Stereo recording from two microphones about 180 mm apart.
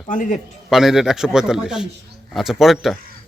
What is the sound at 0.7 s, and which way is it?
Speech, centre (ahead or behind).